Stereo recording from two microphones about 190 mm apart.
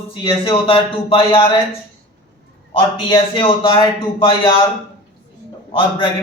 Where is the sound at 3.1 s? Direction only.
25° left (ahead or behind).